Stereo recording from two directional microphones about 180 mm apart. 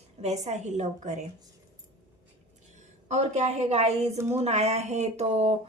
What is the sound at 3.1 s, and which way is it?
A woman's voice, 40° right (ahead or behind).